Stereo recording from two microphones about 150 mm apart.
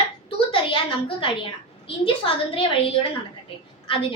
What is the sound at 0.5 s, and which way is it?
A woman's voice, 35° left (ahead or behind).